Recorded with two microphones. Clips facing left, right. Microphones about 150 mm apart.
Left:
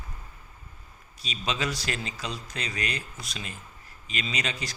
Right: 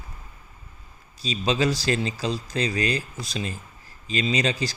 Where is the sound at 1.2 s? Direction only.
30° right (ahead or behind).